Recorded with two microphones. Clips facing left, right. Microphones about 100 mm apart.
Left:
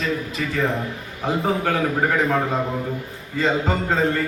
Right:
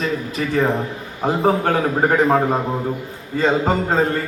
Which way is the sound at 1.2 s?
35° right (ahead or behind).